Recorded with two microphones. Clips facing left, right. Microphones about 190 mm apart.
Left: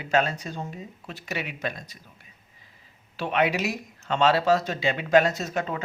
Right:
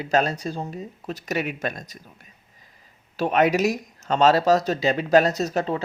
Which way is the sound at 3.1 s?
40° right (ahead or behind).